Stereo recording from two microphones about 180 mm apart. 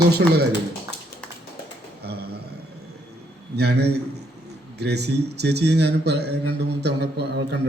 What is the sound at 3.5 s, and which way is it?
A man's voice, 65° right (ahead or behind).